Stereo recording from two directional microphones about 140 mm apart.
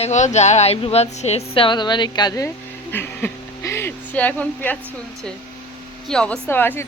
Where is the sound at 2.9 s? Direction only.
15° left (ahead or behind).